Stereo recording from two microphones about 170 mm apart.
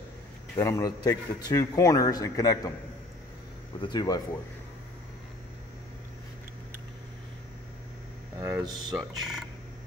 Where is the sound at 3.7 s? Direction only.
25° left (ahead or behind).